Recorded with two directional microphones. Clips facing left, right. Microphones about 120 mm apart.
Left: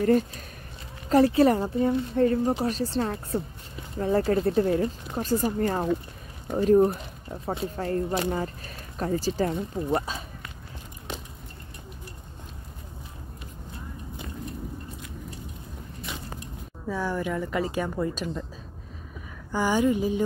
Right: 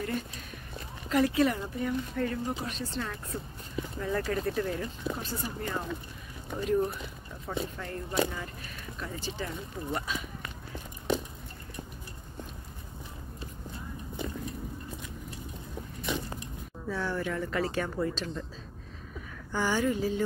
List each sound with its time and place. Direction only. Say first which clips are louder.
0.0 s speech: left 12 dB; 40° left (ahead or behind)
16.8 s a woman's voice: left 4 dB; 10° left (ahead or behind)
19.5 s a woman's voice: left 5 dB; 15° left (ahead or behind)